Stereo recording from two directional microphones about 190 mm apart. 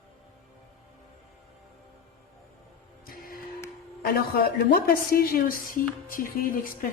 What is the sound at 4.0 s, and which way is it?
A woman's voice, 50° left (ahead or behind).